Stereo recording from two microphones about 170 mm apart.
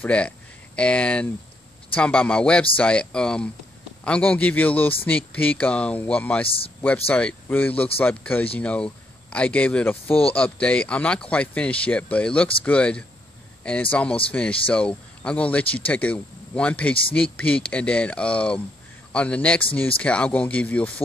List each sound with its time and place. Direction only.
0.0 s speech: 5° left (ahead or behind)
6.4 s speech: 35° left (ahead or behind)
7.1 s speech: 10° left (ahead or behind)